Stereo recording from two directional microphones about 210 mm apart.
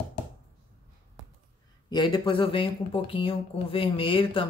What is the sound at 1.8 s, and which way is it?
Speech, 20° left (ahead or behind).